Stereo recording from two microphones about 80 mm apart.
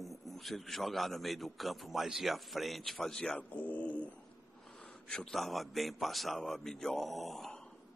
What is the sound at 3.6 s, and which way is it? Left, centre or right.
Speech, centre.